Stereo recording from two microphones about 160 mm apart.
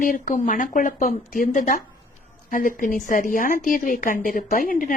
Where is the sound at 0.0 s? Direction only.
55° left (ahead or behind).